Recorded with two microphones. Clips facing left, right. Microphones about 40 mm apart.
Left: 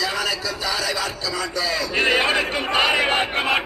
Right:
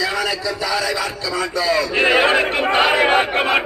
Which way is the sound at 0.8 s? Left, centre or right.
Centre.